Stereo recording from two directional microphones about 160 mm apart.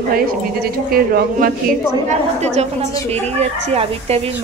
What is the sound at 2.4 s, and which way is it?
A woman's voice, 45° right (ahead or behind).